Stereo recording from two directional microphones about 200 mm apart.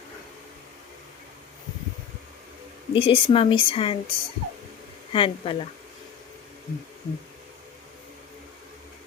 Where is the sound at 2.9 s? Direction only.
25° left (ahead or behind).